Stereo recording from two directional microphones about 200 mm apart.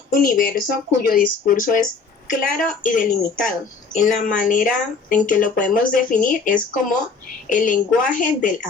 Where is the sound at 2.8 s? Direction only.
40° left (ahead or behind).